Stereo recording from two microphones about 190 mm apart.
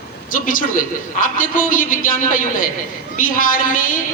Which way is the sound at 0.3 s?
45° left (ahead or behind).